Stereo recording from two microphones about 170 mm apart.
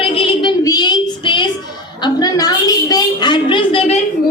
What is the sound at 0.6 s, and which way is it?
Child singing, 20° left (ahead or behind).